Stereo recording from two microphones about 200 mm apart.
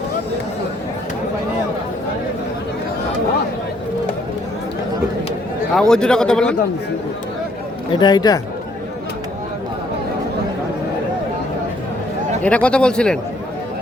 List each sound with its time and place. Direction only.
5.7 s a man's voice: 5° left (ahead or behind)
7.9 s speech: 20° left (ahead or behind)
12.4 s a man's voice: 5° left (ahead or behind)